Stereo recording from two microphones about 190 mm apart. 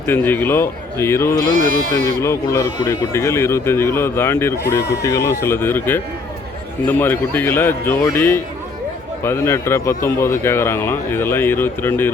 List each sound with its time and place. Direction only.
0.0 s a man's voice: 10° left (ahead or behind)
1.5 s speech: 45° right (ahead or behind)
2.2 s a man's voice: 15° left (ahead or behind)